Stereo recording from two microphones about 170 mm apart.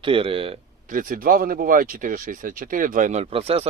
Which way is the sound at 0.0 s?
30° right (ahead or behind).